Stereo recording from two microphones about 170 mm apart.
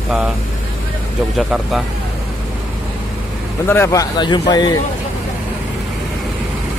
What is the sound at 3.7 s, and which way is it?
Speech, 15° left (ahead or behind).